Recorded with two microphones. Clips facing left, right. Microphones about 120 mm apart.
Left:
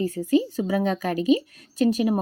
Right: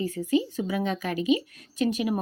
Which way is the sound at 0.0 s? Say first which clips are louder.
Left 4 dB; 40° left (ahead or behind).